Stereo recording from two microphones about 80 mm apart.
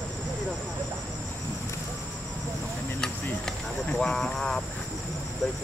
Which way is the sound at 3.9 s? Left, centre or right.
Centre.